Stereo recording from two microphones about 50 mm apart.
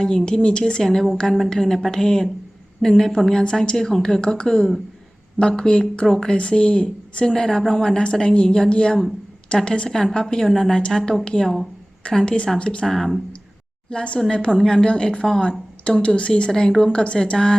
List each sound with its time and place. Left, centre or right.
0.0 s a woman's voice: centre
12.8 s speech: centre
13.9 s a woman's voice: left
16.5 s a woman's voice: centre